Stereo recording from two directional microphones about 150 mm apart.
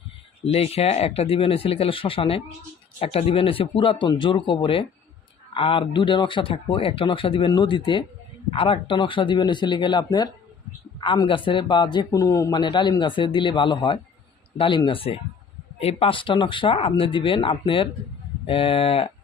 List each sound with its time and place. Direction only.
0.4 s a man's voice: 40° left (ahead or behind)